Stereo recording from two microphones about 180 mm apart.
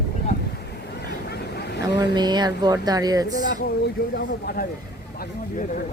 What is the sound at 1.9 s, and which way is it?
Speech, 25° right (ahead or behind).